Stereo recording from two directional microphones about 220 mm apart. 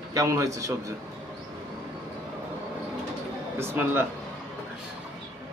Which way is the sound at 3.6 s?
10° right (ahead or behind).